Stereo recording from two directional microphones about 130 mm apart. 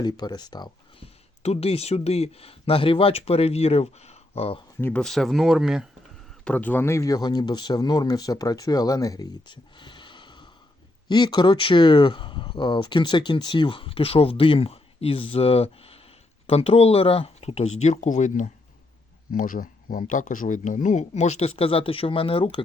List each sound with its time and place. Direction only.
0.0 s speech: 30° left (ahead or behind)
1.4 s speech: 55° left (ahead or behind)
4.8 s speech: 15° left (ahead or behind)
5.0 s speech: centre (ahead or behind)
6.4 s speech: 10° left (ahead or behind); by 18.5 s 70° left (ahead or behind)
19.3 s speech: 90° left; by 22.6 s 45° left (ahead or behind)